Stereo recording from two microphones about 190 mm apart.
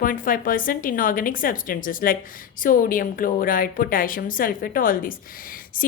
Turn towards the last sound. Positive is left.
turn(degrees=45)  # may be behind; listen again after turning